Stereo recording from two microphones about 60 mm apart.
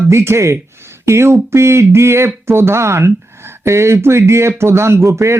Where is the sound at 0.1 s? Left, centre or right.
Right.